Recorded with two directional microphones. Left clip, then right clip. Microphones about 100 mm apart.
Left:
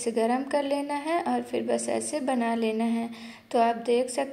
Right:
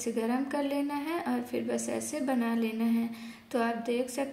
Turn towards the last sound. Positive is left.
turn(degrees=30)  # may be behind; listen again after turning